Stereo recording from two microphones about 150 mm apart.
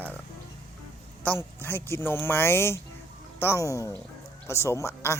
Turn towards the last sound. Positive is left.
turn(degrees=20)  # may be behind; listen again after turning